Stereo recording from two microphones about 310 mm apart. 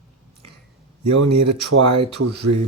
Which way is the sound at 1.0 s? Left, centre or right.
Right.